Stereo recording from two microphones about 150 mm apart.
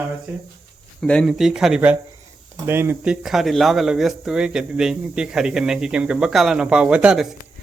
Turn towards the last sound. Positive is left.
turn(degrees=-5)  # may be behind; listen again after turning